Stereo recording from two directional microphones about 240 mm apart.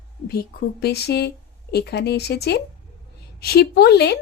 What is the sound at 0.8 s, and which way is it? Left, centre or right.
A woman's voice, left.